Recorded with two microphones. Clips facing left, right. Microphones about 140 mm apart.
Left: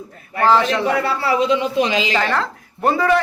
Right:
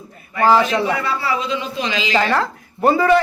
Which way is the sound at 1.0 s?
65° left (ahead or behind).